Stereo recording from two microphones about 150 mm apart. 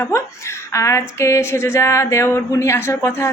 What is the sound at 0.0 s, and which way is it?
A woman's voice, 20° left (ahead or behind).